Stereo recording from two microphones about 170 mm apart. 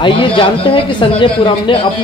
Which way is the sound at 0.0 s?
30° left (ahead or behind).